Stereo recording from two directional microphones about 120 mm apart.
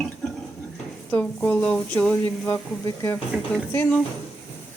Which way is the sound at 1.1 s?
15° left (ahead or behind).